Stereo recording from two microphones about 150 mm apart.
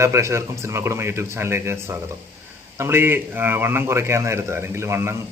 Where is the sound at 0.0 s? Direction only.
20° right (ahead or behind).